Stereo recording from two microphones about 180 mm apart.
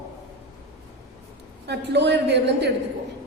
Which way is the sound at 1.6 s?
70° right (ahead or behind).